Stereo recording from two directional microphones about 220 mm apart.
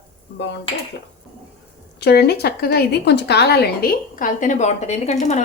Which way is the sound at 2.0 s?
45° left (ahead or behind).